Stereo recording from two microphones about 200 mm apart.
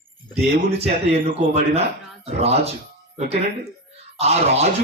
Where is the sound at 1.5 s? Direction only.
30° right (ahead or behind).